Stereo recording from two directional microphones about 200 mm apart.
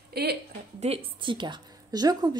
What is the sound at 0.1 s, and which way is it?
Speech, 55° right (ahead or behind).